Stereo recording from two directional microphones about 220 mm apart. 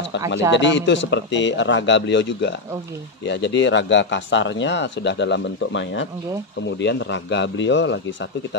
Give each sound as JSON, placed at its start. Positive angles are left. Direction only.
{"t": 0.5, "sound": "a man's voice", "side_deg": 55}